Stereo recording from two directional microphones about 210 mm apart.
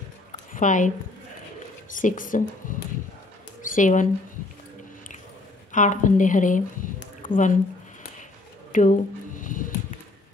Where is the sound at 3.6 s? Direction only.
40° left (ahead or behind).